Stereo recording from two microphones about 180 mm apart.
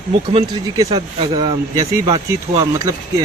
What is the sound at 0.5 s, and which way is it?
Speech, 30° right (ahead or behind).